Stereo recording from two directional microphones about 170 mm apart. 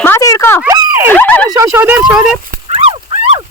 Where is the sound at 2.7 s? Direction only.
30° right (ahead or behind).